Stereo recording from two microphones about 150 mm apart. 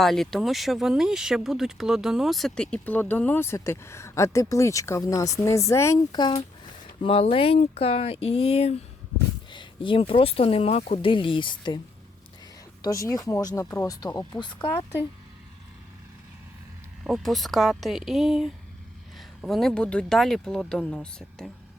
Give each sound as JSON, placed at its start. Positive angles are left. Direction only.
{"t": 0.0, "sound": "speech", "side_deg": 0}
{"t": 7.0, "sound": "speech", "side_deg": 40}
{"t": 12.8, "sound": "speech", "side_deg": 20}
{"t": 17.0, "sound": "speech", "side_deg": 0}